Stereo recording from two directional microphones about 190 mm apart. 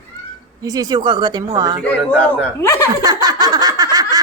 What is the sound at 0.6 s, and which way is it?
Speech, 20° right (ahead or behind).